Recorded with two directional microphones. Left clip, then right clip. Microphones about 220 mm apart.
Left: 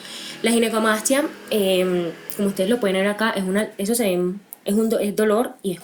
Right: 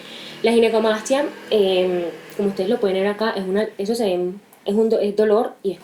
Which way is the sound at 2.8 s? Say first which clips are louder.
Right 1 dB; 50° left (ahead or behind).